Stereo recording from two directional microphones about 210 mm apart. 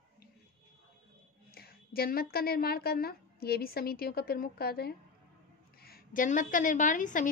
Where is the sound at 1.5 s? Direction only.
45° left (ahead or behind).